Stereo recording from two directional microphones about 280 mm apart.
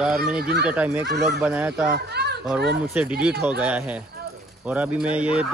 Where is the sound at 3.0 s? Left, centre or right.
Centre.